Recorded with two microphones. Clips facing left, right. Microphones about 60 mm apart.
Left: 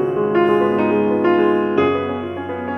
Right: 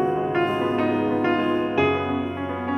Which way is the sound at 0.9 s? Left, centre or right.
Left.